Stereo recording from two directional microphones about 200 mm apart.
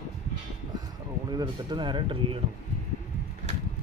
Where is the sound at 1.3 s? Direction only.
20° right (ahead or behind).